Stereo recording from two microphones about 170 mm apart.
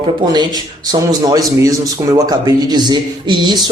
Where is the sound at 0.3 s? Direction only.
20° right (ahead or behind).